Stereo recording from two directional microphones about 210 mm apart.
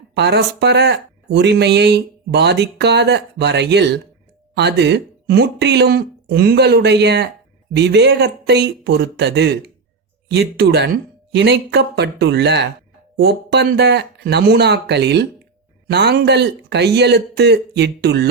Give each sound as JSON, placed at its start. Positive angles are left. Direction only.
{"t": 0.1, "sound": "speech", "side_deg": -55}